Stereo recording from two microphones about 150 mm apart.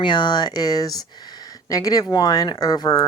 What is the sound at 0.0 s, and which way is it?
Speech, 30° left (ahead or behind).